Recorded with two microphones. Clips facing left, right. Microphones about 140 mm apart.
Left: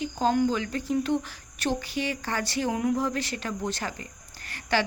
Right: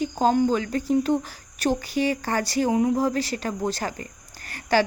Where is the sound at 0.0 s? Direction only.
40° right (ahead or behind).